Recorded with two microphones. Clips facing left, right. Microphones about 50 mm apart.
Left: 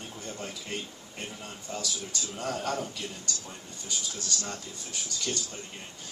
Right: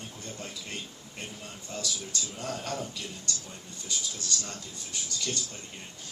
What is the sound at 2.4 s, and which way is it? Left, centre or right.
Speech, left.